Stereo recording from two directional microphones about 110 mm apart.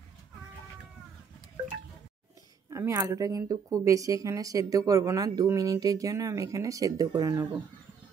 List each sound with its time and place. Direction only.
2.7 s speech: 30° right (ahead or behind)